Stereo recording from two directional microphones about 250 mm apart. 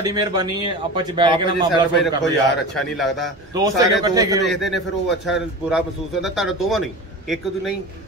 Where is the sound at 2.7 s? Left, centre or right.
Centre.